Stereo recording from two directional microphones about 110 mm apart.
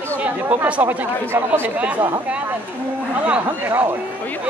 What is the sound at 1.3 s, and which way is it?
Speech, 20° right (ahead or behind).